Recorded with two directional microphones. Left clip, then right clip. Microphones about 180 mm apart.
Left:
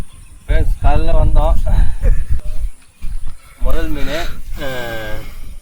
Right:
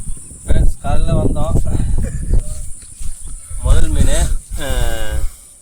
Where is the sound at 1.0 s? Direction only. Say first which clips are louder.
Left 1 dB; 25° right (ahead or behind).